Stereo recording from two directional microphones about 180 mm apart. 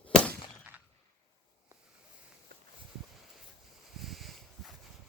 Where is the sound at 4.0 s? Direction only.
Centre (ahead or behind).